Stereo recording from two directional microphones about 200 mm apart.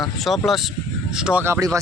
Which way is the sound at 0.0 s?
Centre (ahead or behind).